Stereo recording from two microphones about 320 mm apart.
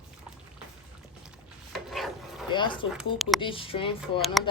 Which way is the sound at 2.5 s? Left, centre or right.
Centre.